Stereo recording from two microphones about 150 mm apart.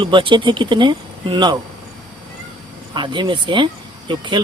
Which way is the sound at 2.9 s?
30° right (ahead or behind).